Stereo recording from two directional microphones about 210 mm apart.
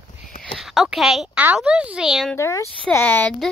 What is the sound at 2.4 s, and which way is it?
Speech, 15° left (ahead or behind).